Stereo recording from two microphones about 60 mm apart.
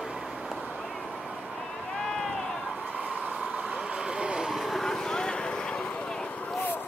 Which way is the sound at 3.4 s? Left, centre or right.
Centre.